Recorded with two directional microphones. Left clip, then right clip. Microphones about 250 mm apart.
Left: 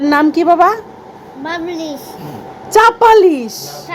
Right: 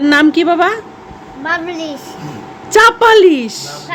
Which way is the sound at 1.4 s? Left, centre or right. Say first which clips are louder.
Right 3 dB; right.